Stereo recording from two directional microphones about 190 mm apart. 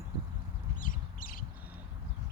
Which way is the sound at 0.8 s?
45° left (ahead or behind).